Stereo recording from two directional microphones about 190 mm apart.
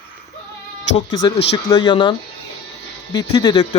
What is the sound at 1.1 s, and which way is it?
Speech, 25° left (ahead or behind).